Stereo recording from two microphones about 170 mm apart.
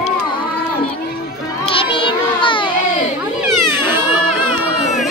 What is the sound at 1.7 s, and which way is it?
Child singing, 30° left (ahead or behind).